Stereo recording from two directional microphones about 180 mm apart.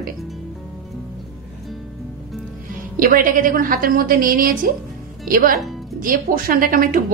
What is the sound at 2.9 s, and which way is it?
Speech, 50° right (ahead or behind).